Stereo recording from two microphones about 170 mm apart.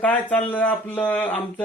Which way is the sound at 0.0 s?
10° left (ahead or behind).